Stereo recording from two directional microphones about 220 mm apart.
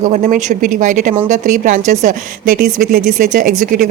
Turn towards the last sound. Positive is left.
turn(degrees=-40)  # may be behind; listen again after turning